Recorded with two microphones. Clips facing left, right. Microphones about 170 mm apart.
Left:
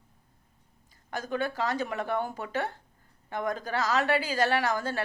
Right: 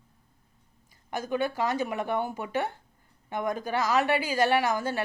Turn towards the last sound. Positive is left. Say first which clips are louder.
# right 2 dB
turn(degrees=-15)  # may be behind; listen again after turning